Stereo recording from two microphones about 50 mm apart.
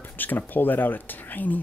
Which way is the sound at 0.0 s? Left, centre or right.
Left.